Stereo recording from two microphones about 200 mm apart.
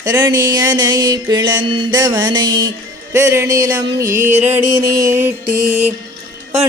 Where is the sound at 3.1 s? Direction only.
15° right (ahead or behind).